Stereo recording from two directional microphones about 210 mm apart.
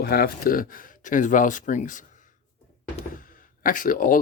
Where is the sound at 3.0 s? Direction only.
40° left (ahead or behind).